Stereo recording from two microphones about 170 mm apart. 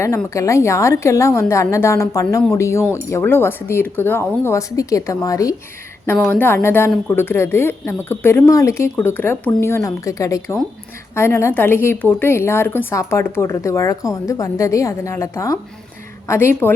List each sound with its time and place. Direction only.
0.3 s a woman's voice: 15° left (ahead or behind)